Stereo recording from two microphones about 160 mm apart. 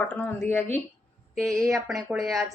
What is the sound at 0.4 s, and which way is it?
Speech, 15° left (ahead or behind).